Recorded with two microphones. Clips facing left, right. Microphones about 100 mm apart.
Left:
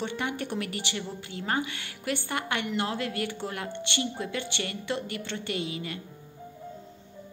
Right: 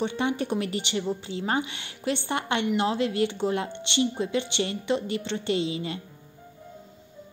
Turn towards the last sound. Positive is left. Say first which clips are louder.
# right 6 dB
turn(degrees=-25)  # may be behind; listen again after turning